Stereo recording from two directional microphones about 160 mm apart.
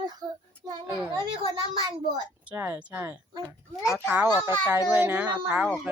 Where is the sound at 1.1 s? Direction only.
30° right (ahead or behind).